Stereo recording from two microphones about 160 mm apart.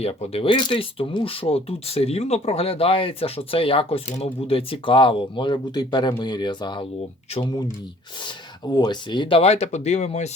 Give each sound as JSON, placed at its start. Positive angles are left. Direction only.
{"t": 0.0, "sound": "speech", "side_deg": 40}
{"t": 8.7, "sound": "speech", "side_deg": 25}